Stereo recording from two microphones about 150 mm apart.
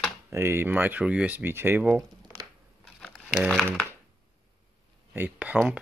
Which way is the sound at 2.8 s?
Centre (ahead or behind).